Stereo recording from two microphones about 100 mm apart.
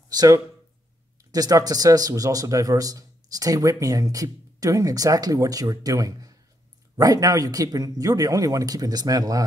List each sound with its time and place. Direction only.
0.1 s speech: 40° right (ahead or behind)